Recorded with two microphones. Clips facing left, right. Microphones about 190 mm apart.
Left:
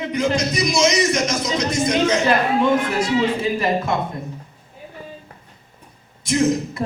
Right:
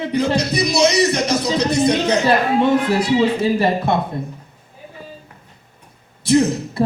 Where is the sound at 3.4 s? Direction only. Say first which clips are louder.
Right 3 dB; 30° right (ahead or behind).